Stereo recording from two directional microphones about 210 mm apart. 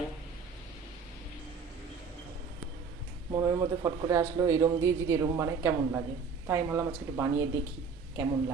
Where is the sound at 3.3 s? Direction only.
15° right (ahead or behind).